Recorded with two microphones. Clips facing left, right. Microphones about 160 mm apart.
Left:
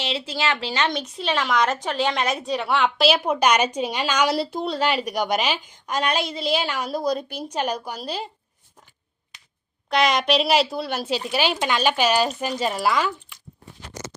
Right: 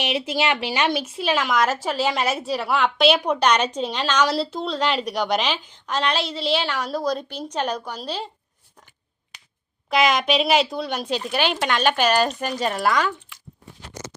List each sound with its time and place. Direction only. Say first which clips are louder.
0.0 s a woman's voice: right 3 dB; 15° right (ahead or behind); by 8.3 s 10° left (ahead or behind)
9.9 s a woman's voice: even; centre (ahead or behind)